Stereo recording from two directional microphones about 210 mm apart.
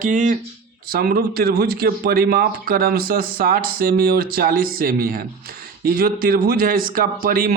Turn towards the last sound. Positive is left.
turn(degrees=-45)  # may be behind; listen again after turning